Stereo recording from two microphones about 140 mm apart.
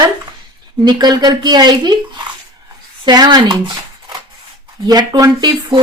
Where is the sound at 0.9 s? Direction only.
30° right (ahead or behind).